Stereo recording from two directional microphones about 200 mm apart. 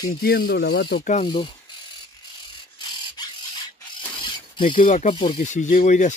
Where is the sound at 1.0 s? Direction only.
35° left (ahead or behind).